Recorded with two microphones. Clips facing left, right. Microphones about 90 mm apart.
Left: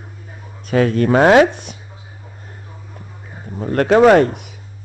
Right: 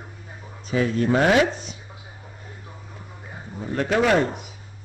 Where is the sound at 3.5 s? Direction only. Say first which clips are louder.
Left 9 dB; 60° left (ahead or behind).